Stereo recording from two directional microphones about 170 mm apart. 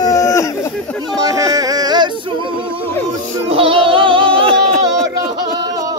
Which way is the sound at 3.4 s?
35° right (ahead or behind).